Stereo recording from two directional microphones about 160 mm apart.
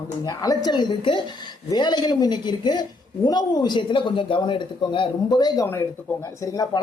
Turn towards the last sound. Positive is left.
turn(degrees=20)  # may be behind; listen again after turning